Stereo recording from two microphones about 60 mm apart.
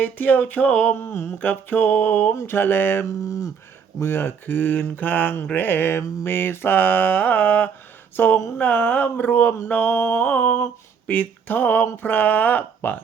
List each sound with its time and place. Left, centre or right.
0.0 s a sound: left
0.9 s a sound: left
1.4 s mantra: left
2.3 s a sound: left
2.6 s mantra: left
3.1 s speech: left
4.0 s mantra: left
5.5 s mantra: left
8.1 s speech: left
8.5 s mantra: left
11.0 s speech: left
12.0 s a sound: left